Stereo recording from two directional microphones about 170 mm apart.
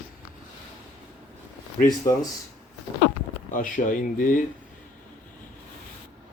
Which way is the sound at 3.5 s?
50° left (ahead or behind).